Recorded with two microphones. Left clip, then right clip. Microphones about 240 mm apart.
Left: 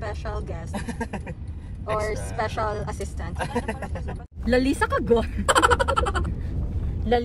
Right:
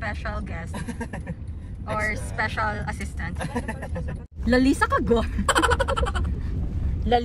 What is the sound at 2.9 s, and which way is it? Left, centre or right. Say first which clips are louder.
Speech: right 1 dB; centre.